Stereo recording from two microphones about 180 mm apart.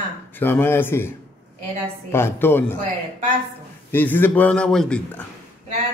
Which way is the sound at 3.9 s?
10° left (ahead or behind).